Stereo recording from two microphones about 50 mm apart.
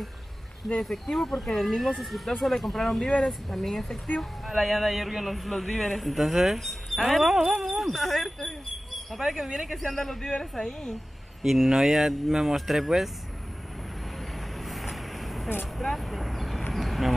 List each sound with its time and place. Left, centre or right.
0.8 s a man's voice: centre
11.4 s a man's voice: centre
14.6 s vehicle: centre